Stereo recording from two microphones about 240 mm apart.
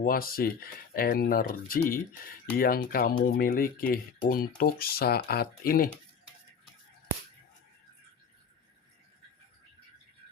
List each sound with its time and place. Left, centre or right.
0.0 s speech: left